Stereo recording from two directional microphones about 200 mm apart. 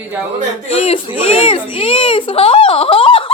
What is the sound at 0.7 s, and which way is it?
Speech, 30° left (ahead or behind).